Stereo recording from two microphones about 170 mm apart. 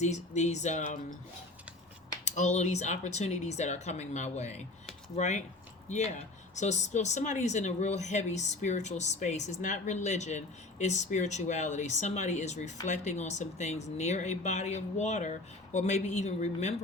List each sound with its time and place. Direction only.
0.0 s speech: 40° left (ahead or behind)
2.2 s speech: 45° left (ahead or behind)